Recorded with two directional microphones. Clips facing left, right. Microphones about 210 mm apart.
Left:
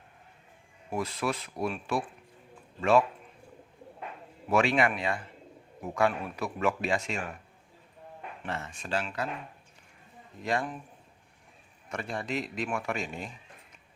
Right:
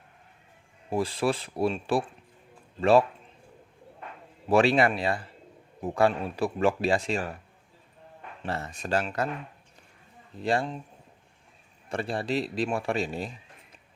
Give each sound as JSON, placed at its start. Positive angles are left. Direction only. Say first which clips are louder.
{"t": 0.9, "sound": "speech", "louder": "right 5 dB", "side_deg": -30}
{"t": 4.4, "sound": "speech", "louder": "right 4 dB", "side_deg": -35}
{"t": 8.4, "sound": "speech", "louder": "right 5 dB", "side_deg": -35}
{"t": 10.4, "sound": "speech", "louder": "right 4 dB", "side_deg": -30}
{"t": 11.9, "sound": "speech", "louder": "right 5 dB", "side_deg": -30}